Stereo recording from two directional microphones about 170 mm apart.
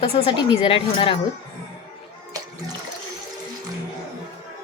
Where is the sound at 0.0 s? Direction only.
30° left (ahead or behind).